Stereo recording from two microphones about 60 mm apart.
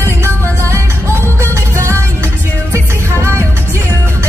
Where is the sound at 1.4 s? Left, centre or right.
Right.